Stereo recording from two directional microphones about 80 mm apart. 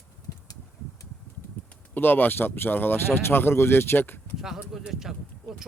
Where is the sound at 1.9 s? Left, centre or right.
Left.